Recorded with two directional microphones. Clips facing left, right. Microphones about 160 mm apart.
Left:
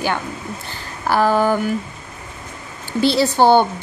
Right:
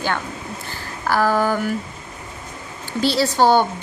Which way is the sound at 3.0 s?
15° left (ahead or behind).